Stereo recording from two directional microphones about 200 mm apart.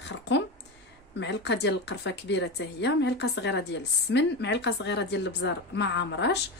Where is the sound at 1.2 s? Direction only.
60° left (ahead or behind).